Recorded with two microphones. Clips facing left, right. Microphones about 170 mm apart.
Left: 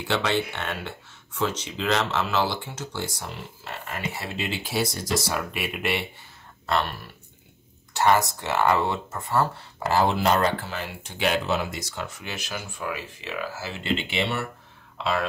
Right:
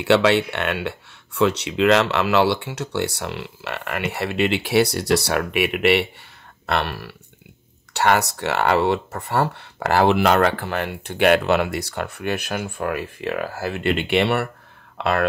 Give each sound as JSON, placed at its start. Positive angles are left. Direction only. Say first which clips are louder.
{"t": 0.0, "sound": "speech", "louder": "right 9 dB", "side_deg": -70}